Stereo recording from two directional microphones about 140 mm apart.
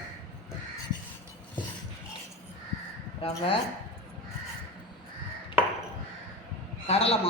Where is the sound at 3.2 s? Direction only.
40° left (ahead or behind).